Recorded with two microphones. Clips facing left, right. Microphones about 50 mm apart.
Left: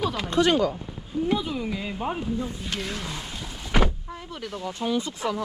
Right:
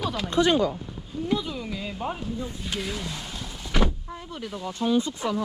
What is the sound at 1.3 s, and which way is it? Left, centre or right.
Speech, centre.